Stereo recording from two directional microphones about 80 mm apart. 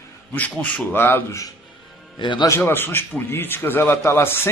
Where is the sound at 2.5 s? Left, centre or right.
Left.